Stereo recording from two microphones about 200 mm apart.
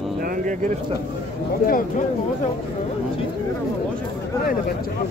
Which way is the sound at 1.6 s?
45° left (ahead or behind).